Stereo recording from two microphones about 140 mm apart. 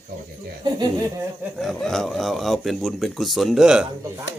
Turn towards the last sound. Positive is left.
turn(degrees=-5)  # may be behind; listen again after turning